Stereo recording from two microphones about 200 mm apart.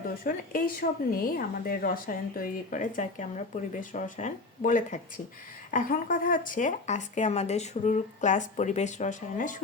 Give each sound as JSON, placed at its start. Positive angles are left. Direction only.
{"t": 0.3, "sound": "a woman's voice", "side_deg": 45}